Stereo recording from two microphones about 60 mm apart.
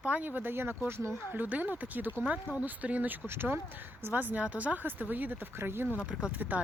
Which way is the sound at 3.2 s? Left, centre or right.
Right.